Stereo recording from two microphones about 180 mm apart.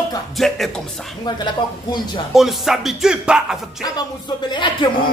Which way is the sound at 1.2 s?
25° left (ahead or behind).